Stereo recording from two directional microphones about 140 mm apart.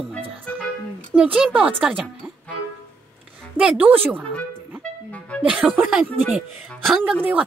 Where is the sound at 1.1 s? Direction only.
10° right (ahead or behind).